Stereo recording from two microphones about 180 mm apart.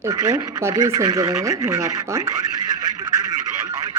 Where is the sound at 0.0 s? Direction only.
20° right (ahead or behind).